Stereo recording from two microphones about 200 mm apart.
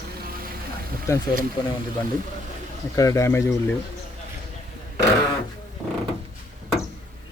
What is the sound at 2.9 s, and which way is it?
Speech, 15° left (ahead or behind).